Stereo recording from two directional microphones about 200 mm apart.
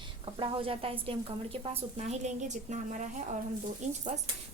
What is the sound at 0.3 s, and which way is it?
A woman's voice, 25° right (ahead or behind).